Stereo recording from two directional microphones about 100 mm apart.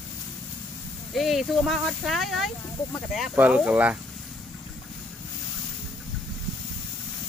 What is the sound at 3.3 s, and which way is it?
Speech, 15° right (ahead or behind).